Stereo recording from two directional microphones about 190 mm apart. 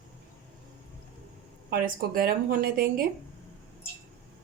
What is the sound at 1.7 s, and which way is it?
A woman's voice, 50° right (ahead or behind).